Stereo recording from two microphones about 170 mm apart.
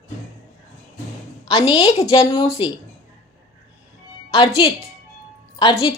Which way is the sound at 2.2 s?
30° left (ahead or behind).